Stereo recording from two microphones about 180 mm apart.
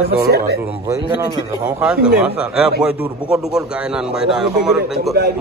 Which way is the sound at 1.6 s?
5° right (ahead or behind).